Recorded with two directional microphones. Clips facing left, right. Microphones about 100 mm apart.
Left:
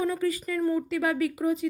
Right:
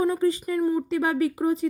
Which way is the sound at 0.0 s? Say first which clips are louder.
Right 4 dB; 30° right (ahead or behind).